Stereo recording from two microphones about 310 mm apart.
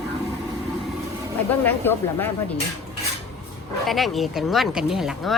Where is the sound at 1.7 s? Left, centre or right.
Centre.